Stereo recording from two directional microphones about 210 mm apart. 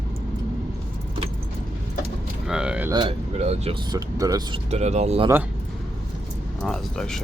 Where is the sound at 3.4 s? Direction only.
30° right (ahead or behind).